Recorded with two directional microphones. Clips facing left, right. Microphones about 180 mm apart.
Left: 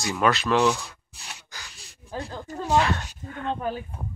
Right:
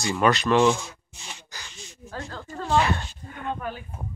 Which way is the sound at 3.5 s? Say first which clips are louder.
Left 3 dB; 30° left (ahead or behind).